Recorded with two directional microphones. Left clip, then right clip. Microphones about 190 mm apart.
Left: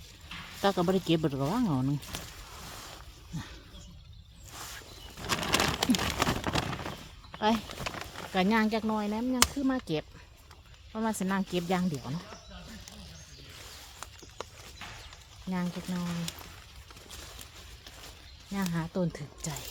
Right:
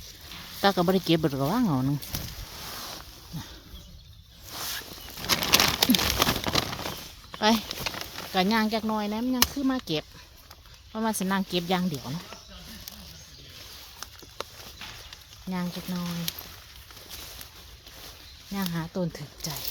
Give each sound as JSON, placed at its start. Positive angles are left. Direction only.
{"t": 0.6, "sound": "speech", "side_deg": -20}
{"t": 4.5, "sound": "a sound", "side_deg": -55}
{"t": 5.2, "sound": "bird flight", "side_deg": -50}
{"t": 5.8, "sound": "a sound", "side_deg": -50}
{"t": 7.3, "sound": "speech", "side_deg": -30}
{"t": 7.7, "sound": "a sound", "side_deg": -45}
{"t": 8.3, "sound": "speech", "side_deg": -15}
{"t": 14.4, "sound": "horse", "side_deg": -65}
{"t": 15.4, "sound": "speech", "side_deg": -15}
{"t": 18.5, "sound": "speech", "side_deg": -10}